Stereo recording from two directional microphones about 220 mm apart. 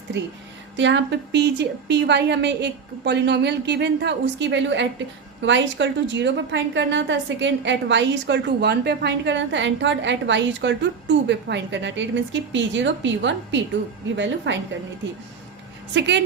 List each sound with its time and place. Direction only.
0.1 s a woman's voice: 55° right (ahead or behind)
16.0 s a woman's voice: 50° right (ahead or behind)